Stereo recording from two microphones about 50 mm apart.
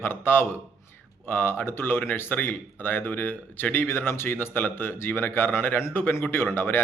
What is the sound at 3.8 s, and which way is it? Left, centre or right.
A man's voice, left.